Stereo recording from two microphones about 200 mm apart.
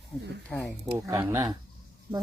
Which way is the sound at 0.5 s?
5° left (ahead or behind).